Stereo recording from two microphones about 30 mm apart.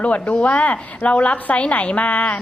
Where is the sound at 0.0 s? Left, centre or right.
Left.